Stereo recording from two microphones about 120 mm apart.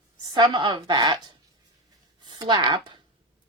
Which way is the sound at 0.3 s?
40° right (ahead or behind).